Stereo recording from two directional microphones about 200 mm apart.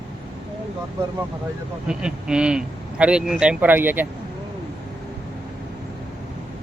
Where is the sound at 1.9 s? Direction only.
5° right (ahead or behind).